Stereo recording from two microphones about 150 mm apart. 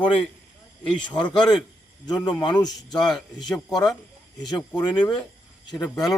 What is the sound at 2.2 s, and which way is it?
Speech, 5° left (ahead or behind).